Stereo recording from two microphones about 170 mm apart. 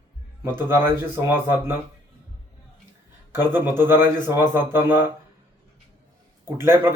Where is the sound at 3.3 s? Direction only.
15° right (ahead or behind).